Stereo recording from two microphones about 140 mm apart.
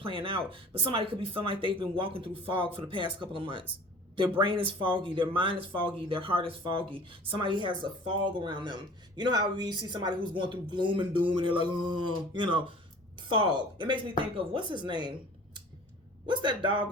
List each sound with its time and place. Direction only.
0.0 s speech: 40° right (ahead or behind)
16.2 s speech: 35° right (ahead or behind)